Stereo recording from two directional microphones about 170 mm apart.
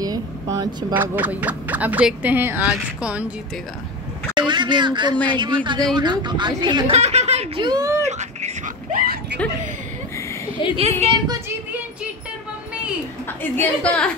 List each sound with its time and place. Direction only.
0.0 s vehicle: 20° right (ahead or behind)
0.9 s speech: 10° right (ahead or behind)
4.4 s speech: 25° right (ahead or behind)
7.0 s speech: 40° right (ahead or behind); by 8.0 s 20° right (ahead or behind)
8.1 s a sound: 40° right (ahead or behind); by 9.4 s 60° right (ahead or behind)
10.8 s speech: 35° right (ahead or behind)
13.4 s a woman's voice: 10° left (ahead or behind)